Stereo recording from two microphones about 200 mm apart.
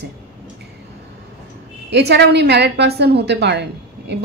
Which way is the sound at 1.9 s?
55° right (ahead or behind).